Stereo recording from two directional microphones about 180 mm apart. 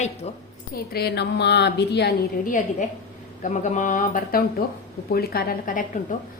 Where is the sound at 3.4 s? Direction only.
40° left (ahead or behind).